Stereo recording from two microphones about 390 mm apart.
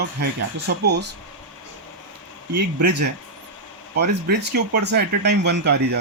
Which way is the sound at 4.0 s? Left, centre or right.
Right.